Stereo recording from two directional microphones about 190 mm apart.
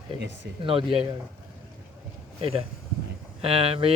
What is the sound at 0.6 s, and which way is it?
Speech, 30° right (ahead or behind).